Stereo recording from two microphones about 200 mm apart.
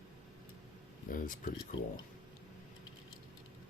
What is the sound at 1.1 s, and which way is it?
Speech, 45° left (ahead or behind).